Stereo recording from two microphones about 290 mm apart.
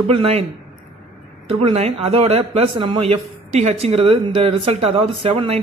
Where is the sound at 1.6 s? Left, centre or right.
Right.